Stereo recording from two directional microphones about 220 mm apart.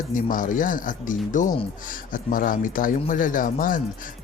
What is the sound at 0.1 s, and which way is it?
Speech, 35° left (ahead or behind).